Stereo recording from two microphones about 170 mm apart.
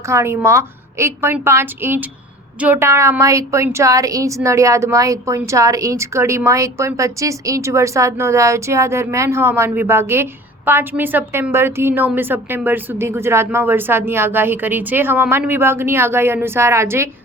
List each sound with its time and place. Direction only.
0.1 s a woman's voice: 15° right (ahead or behind)